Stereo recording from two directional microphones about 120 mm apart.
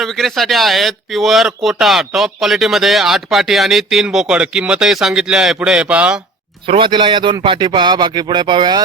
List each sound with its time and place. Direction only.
0.0 s speech: centre (ahead or behind)
6.7 s speech: 45° right (ahead or behind)